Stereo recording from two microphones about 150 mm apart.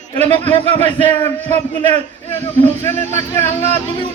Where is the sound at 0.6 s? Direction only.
45° right (ahead or behind).